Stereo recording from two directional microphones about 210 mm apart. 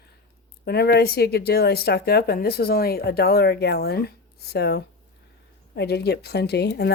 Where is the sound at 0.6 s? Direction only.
50° left (ahead or behind).